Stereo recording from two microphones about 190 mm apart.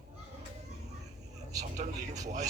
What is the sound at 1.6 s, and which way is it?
Speech, 40° right (ahead or behind).